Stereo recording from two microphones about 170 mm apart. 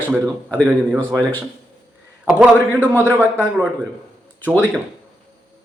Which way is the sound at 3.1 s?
10° right (ahead or behind).